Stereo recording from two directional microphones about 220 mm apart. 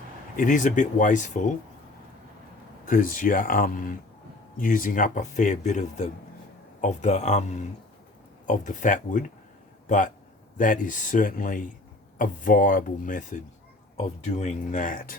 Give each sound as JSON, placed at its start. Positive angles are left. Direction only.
{"t": 0.3, "sound": "speech", "side_deg": 35}
{"t": 2.8, "sound": "speech", "side_deg": 40}